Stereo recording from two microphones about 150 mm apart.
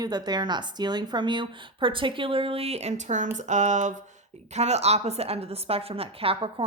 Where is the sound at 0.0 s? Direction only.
30° right (ahead or behind).